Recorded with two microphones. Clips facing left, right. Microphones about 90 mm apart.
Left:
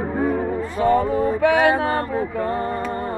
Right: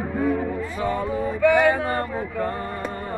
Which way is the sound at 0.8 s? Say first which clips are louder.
Left 7 dB; 50° left (ahead or behind).